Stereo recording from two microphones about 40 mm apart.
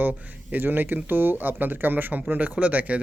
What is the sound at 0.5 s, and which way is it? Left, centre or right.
Speech, right.